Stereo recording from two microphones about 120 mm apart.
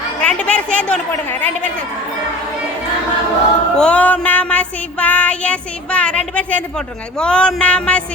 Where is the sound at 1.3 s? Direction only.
15° left (ahead or behind).